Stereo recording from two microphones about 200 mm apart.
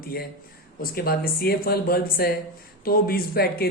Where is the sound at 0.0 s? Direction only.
50° left (ahead or behind).